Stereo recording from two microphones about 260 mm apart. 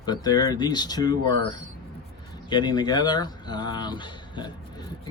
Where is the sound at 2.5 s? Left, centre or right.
Centre.